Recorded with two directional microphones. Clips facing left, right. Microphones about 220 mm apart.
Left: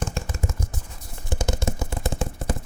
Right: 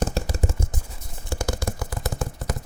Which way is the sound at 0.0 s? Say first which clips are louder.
Right 4 dB; 35° right (ahead or behind).